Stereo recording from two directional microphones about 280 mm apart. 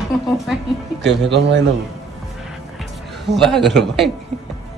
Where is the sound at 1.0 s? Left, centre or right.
Right.